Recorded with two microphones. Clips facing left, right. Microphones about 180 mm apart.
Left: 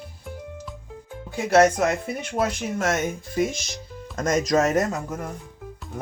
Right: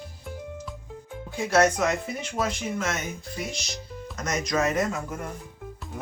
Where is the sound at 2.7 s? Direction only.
45° left (ahead or behind).